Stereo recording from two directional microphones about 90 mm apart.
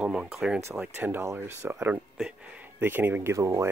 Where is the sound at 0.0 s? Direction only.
10° right (ahead or behind).